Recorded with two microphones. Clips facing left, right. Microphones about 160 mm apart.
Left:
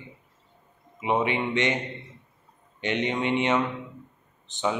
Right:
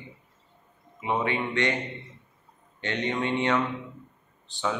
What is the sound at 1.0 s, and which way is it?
Speech, 20° left (ahead or behind).